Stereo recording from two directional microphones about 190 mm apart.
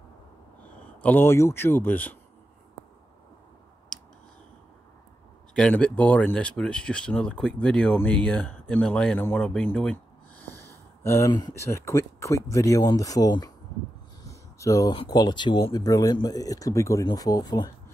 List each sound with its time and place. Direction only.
1.0 s speech: 10° left (ahead or behind)
5.5 s speech: 5° left (ahead or behind)
10.4 s snort: 10° left (ahead or behind)
11.0 s speech: 15° left (ahead or behind)